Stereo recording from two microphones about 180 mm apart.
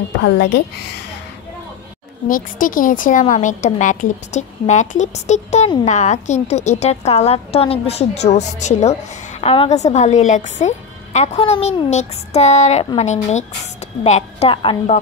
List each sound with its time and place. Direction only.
0.2 s a woman's voice: 70° left (ahead or behind)
2.2 s a woman's voice: 50° left (ahead or behind); by 15.0 s 30° left (ahead or behind)